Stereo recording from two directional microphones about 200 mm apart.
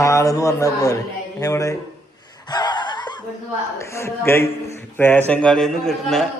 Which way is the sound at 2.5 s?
20° left (ahead or behind).